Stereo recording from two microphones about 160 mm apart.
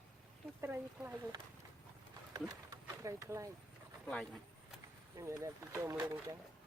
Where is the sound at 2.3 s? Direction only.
20° right (ahead or behind).